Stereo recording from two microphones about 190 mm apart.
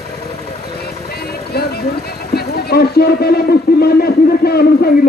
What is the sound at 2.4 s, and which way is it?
A man's voice, 55° left (ahead or behind).